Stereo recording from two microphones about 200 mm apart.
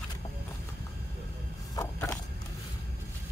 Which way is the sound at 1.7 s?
15° left (ahead or behind).